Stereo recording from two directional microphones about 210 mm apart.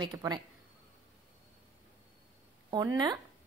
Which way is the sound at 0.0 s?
20° right (ahead or behind).